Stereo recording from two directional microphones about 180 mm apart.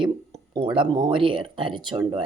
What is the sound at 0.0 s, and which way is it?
Speech, 25° right (ahead or behind).